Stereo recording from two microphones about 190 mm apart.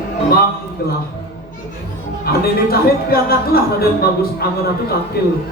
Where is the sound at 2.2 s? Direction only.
55° left (ahead or behind).